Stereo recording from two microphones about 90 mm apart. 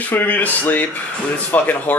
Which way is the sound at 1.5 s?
20° left (ahead or behind).